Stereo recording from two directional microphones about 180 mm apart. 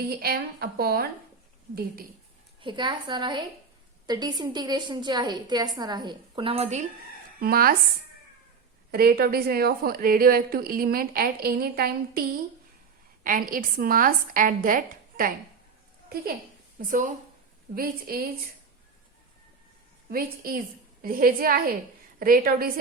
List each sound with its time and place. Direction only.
0.1 s a woman's voice: 60° right (ahead or behind)
2.6 s a woman's voice: 25° right (ahead or behind)
7.3 s a woman's voice: 55° right (ahead or behind)
8.9 s a woman's voice: 60° right (ahead or behind)
16.7 s a woman's voice: 50° right (ahead or behind)
20.1 s a woman's voice: 55° right (ahead or behind)